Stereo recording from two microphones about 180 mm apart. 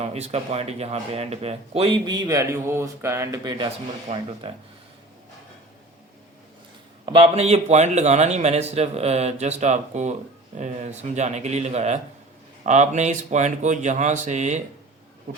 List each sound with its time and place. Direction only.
0.0 s speech: 35° right (ahead or behind)
4.1 s speech: 30° right (ahead or behind)
7.0 s speech: 30° right (ahead or behind)